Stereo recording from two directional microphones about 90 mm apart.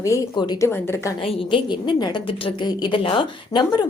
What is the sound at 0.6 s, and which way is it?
Speech, 30° left (ahead or behind).